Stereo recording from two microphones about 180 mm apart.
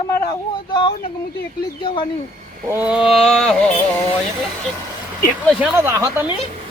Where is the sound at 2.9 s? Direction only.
Centre (ahead or behind).